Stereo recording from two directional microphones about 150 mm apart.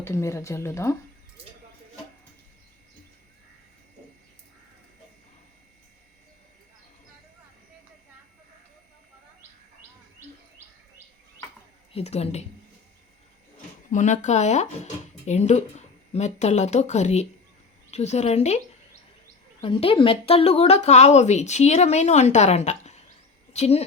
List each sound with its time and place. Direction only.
0.0 s speech: 20° left (ahead or behind)
11.9 s a woman's voice: 45° left (ahead or behind)
13.9 s a woman's voice: 55° left (ahead or behind)
19.6 s a woman's voice: 35° left (ahead or behind)